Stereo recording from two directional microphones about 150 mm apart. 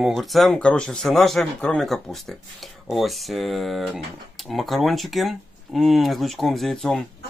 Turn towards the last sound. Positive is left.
turn(degrees=0)  # may be behind; listen again after turning